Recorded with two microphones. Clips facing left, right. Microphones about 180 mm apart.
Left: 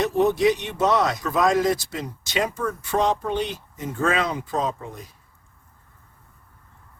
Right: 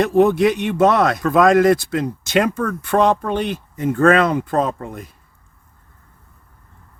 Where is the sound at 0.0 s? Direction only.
55° right (ahead or behind).